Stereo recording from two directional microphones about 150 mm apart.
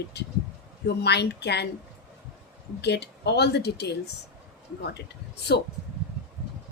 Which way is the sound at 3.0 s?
90° left.